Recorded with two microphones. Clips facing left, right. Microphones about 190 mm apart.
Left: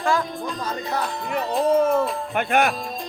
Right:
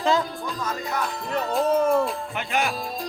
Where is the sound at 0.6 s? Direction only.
35° left (ahead or behind).